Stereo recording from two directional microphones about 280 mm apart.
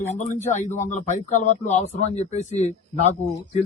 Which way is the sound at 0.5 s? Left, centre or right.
Left.